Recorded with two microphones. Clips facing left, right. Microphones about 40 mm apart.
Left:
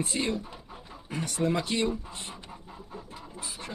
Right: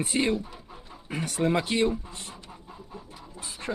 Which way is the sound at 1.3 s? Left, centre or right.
Right.